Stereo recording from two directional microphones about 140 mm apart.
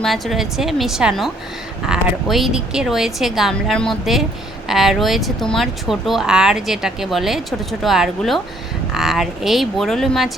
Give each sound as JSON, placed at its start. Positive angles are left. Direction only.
{"t": 0.0, "sound": "speech", "side_deg": 0}